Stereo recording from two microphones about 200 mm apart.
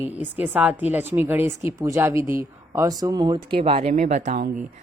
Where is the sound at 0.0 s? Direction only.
10° right (ahead or behind).